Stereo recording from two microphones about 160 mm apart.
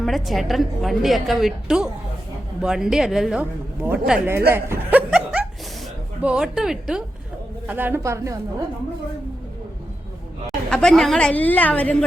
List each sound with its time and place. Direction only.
0.0 s a woman's voice: centre (ahead or behind)
4.4 s chuckle: 15° right (ahead or behind)
6.2 s a woman's voice: 5° right (ahead or behind)
10.4 s a woman's voice: 5° left (ahead or behind)